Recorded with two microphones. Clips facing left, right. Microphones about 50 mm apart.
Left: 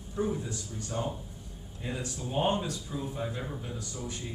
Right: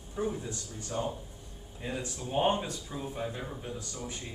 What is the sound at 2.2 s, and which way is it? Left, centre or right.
Speech, centre.